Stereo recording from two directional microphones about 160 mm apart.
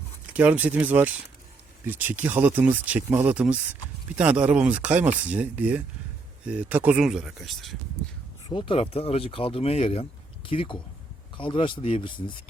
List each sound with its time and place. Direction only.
0.3 s a man's voice: 10° right (ahead or behind)
8.4 s speech: 30° left (ahead or behind)